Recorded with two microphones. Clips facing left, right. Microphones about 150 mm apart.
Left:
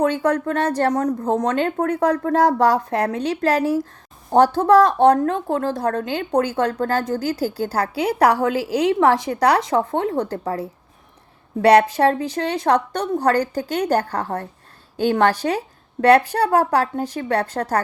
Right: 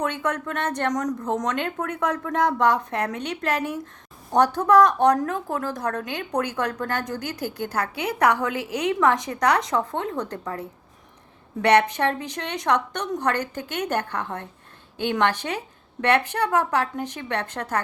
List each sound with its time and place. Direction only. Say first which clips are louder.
0.0 s a woman's voice: left 7 dB; 30° left (ahead or behind)